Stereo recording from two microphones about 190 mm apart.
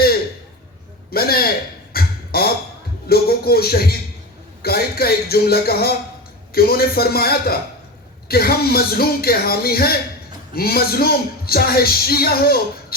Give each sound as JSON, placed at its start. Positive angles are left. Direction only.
{"t": 1.1, "sound": "speech", "side_deg": 55}
{"t": 1.9, "sound": "beatboxing", "side_deg": 55}
{"t": 3.1, "sound": "music", "side_deg": 55}
{"t": 4.6, "sound": "speech", "side_deg": 55}